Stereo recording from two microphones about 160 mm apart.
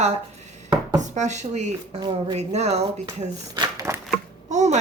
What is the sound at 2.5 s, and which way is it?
Speech, 45° right (ahead or behind).